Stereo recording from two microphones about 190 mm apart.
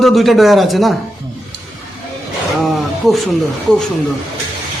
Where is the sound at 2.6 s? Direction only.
Centre (ahead or behind).